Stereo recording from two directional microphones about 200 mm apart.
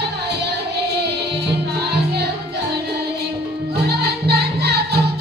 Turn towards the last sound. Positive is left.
turn(degrees=-55)  # may be behind; listen again after turning